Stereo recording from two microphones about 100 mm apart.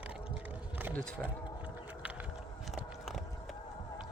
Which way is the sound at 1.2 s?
15° left (ahead or behind).